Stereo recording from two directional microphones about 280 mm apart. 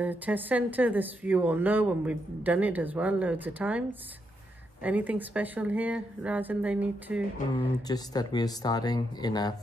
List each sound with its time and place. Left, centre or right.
0.0 s speech: centre
4.8 s speech: centre
7.6 s speech: centre